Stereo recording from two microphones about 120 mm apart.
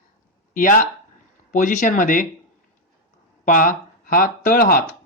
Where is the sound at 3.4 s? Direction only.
90° left.